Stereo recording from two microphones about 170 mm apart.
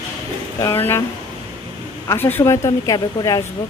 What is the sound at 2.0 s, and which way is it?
Speech, 15° left (ahead or behind).